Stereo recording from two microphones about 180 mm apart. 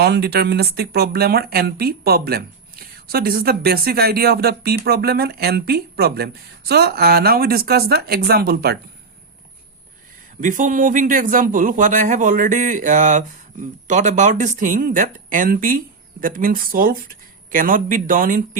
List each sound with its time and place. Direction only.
0.0 s speech: 60° right (ahead or behind)
10.4 s speech: 45° right (ahead or behind)